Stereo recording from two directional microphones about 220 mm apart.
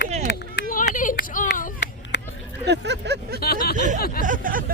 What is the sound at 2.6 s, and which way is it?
Vehicle, 50° right (ahead or behind).